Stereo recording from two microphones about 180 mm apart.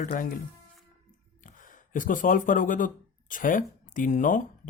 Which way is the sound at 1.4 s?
45° left (ahead or behind).